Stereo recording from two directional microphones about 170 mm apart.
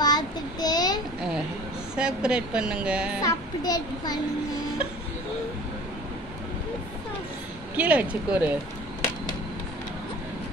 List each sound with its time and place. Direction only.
0.0 s child singing: 25° left (ahead or behind)
2.0 s speech: 5° right (ahead or behind)
3.2 s a child's voice: 20° left (ahead or behind)
7.7 s speech: 10° right (ahead or behind)